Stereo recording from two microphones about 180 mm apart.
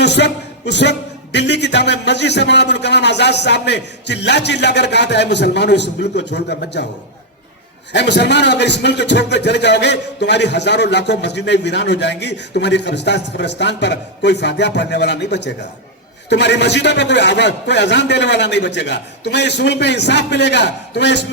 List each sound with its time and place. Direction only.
0.0 s a man's voice: 70° left (ahead or behind)
7.9 s a man's voice: 70° left (ahead or behind)